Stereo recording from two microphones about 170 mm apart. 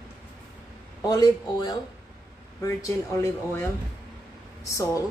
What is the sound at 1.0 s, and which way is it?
A woman's voice, 25° left (ahead or behind).